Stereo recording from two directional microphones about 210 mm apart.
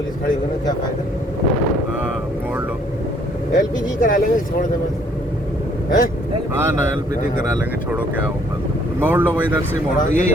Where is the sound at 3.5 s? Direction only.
40° left (ahead or behind).